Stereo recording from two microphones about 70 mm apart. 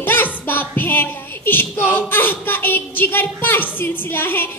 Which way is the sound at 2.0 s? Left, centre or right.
Left.